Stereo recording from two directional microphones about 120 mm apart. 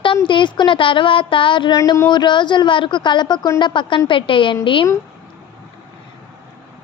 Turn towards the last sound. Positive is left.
turn(degrees=45)  # may be behind; listen again after turning